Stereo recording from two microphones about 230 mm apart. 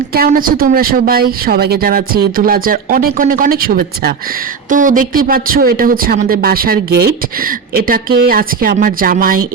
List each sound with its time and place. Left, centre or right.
0.1 s speech: right